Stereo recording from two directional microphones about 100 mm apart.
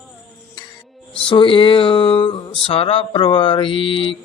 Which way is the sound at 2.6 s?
70° left (ahead or behind).